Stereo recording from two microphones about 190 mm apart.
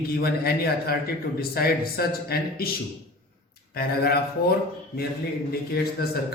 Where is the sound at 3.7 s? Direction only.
55° left (ahead or behind).